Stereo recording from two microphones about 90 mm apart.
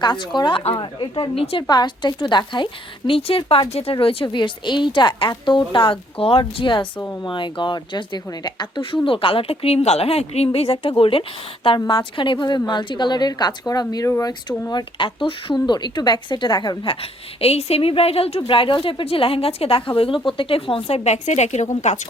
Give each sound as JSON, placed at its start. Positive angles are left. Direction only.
{"t": 0.0, "sound": "a woman's voice", "side_deg": 60}
{"t": 0.3, "sound": "speech", "side_deg": 75}
{"t": 1.6, "sound": "a woman's voice", "side_deg": 55}
{"t": 3.1, "sound": "a woman's voice", "side_deg": 90}
{"t": 6.6, "sound": "a woman's voice", "side_deg": 60}
{"t": 11.9, "sound": "a woman's voice", "side_deg": 60}
{"t": 14.7, "sound": "a woman's voice", "side_deg": 50}
{"t": 15.0, "sound": "speech", "side_deg": 75}
{"t": 15.5, "sound": "a woman's voice", "side_deg": 55}
{"t": 16.8, "sound": "a woman's voice", "side_deg": 90}
{"t": 20.0, "sound": "speech", "side_deg": 70}